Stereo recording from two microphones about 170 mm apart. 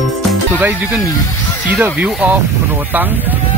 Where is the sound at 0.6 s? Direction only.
10° right (ahead or behind).